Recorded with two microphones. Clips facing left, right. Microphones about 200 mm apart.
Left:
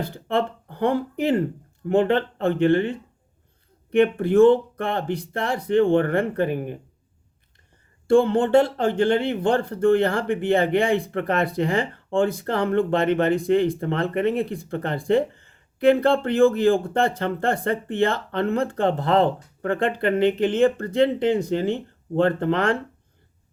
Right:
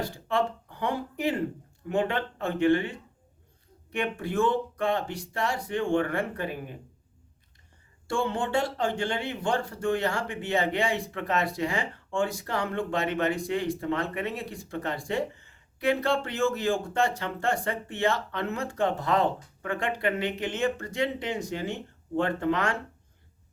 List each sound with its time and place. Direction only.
0.1 s speech: 55° left (ahead or behind)
8.1 s speech: 55° left (ahead or behind)